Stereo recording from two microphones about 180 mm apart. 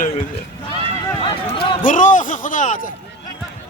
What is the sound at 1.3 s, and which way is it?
Speech, 30° left (ahead or behind).